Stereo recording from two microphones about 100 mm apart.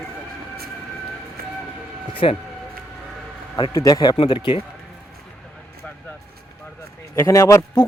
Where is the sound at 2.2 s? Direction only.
65° left (ahead or behind).